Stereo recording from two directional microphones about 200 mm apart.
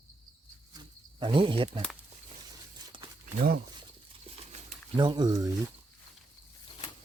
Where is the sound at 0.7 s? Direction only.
25° right (ahead or behind).